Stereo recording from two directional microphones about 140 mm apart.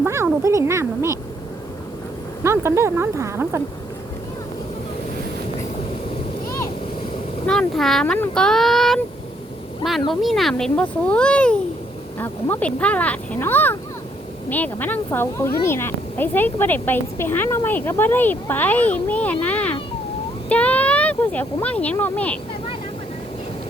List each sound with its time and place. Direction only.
0.0 s a sound: 20° right (ahead or behind)
0.4 s speech: 20° right (ahead or behind)
2.4 s speech: 20° right (ahead or behind)
7.4 s speech: centre (ahead or behind)
10.1 s speech: centre (ahead or behind)